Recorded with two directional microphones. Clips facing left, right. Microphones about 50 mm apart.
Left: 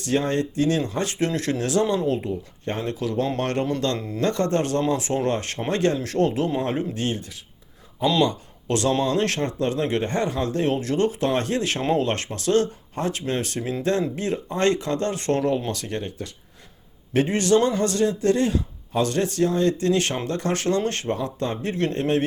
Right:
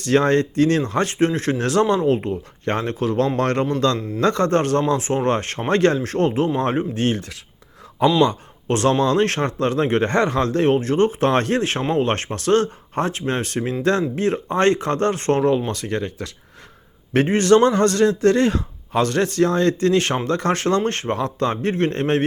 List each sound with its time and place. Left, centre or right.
0.0 s a man's voice: right
1.2 s speech: right
1.5 s a man's voice: right
2.6 s a man's voice: right
3.9 s speech: centre
4.2 s a man's voice: right
4.9 s speech: right
8.0 s speech: right
8.6 s speech: right
10.0 s a man's voice: right
10.8 s speech: right
11.3 s a man's voice: right
17.2 s a man's voice: right
21.2 s a man's voice: right